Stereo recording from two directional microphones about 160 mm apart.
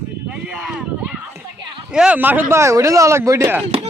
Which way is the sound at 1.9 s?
10° right (ahead or behind).